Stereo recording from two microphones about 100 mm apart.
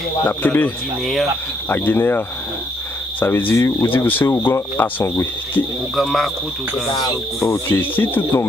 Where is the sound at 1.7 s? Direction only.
25° left (ahead or behind).